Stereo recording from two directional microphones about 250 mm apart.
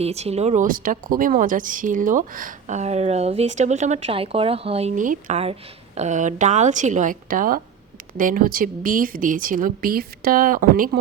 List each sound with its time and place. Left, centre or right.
0.0 s speech: right